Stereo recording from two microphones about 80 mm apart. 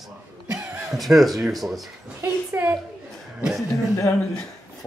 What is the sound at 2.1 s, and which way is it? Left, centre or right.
Speech, right.